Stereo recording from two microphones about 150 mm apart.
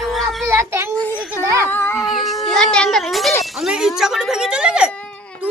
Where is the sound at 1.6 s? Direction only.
15° left (ahead or behind).